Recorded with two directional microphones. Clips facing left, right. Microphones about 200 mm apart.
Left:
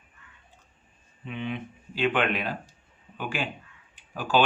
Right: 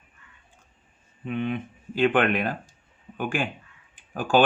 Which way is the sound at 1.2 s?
50° right (ahead or behind).